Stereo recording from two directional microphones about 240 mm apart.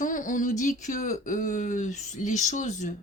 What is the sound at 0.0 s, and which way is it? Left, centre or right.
Speech, left.